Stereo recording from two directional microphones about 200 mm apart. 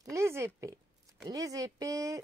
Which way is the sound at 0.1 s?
15° right (ahead or behind).